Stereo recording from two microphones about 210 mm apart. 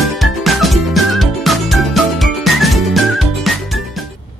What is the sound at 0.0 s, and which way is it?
Music, centre (ahead or behind).